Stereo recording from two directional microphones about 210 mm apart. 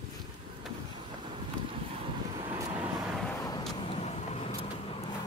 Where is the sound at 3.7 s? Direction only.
30° left (ahead or behind).